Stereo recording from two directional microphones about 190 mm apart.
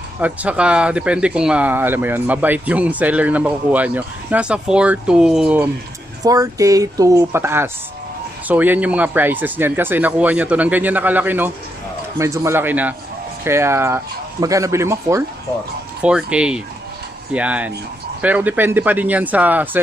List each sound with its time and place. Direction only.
0.2 s speech: 5° right (ahead or behind)
6.2 s speech: 20° right (ahead or behind)